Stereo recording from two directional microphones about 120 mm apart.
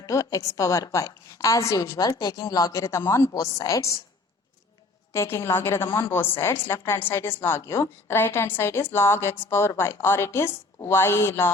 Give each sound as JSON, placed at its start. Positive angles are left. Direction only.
{"t": 0.0, "sound": "a woman's voice", "side_deg": 25}
{"t": 5.1, "sound": "a woman's voice", "side_deg": 25}